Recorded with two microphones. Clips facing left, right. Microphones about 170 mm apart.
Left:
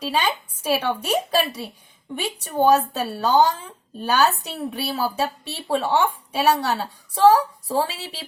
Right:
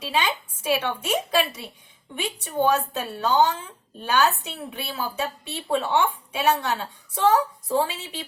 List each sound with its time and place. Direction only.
0.0 s a woman's voice: 35° left (ahead or behind)